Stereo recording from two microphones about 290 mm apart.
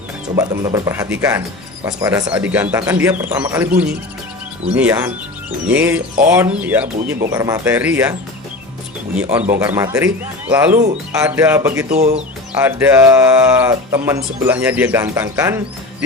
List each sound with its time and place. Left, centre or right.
0.3 s speech: centre
4.7 s speech: centre
9.5 s speech: centre
11.9 s speech: right
12.5 s speech: centre